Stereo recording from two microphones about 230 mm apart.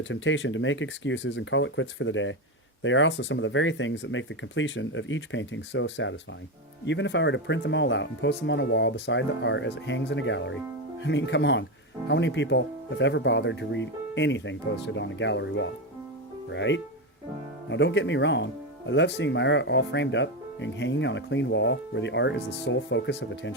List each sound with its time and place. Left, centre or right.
0.0 s speech: left